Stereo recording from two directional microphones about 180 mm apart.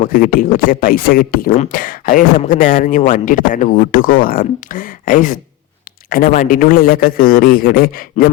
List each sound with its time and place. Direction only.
0.0 s speech: 50° left (ahead or behind)